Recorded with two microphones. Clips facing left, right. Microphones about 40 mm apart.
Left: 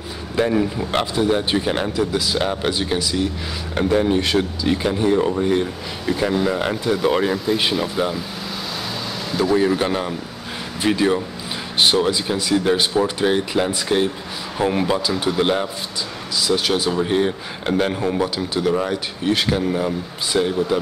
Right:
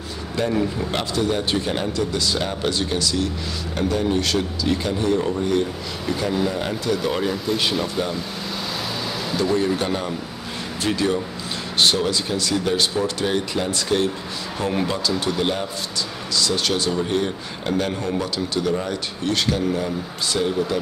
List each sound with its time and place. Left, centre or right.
0.4 s speech: centre
7.7 s speech: centre
9.6 s speech: centre